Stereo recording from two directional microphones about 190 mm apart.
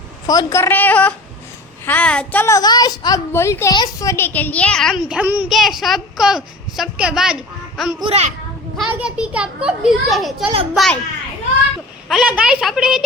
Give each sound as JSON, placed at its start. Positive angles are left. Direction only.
{"t": 0.3, "sound": "a woman's voice", "side_deg": 15}
{"t": 7.9, "sound": "a child's voice", "side_deg": -30}
{"t": 8.8, "sound": "a child's voice", "side_deg": -5}
{"t": 12.0, "sound": "a child's voice", "side_deg": -5}